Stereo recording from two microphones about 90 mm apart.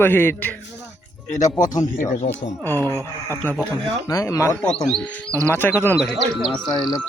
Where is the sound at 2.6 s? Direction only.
25° left (ahead or behind).